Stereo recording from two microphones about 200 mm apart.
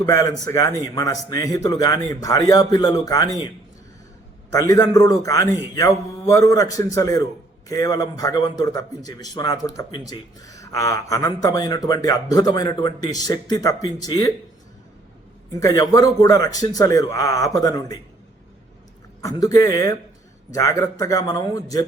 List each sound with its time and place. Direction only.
0.0 s a man's voice: 15° left (ahead or behind)
4.5 s a man's voice: 15° left (ahead or behind)
15.6 s a man's voice: 15° left (ahead or behind)
19.2 s a man's voice: 20° left (ahead or behind)